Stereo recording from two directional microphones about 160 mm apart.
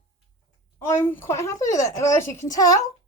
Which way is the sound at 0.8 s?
15° left (ahead or behind).